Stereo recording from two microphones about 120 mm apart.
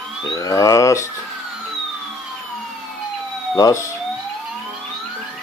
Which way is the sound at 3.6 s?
25° left (ahead or behind).